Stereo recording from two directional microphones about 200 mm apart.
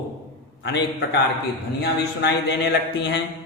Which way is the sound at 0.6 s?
60° left (ahead or behind).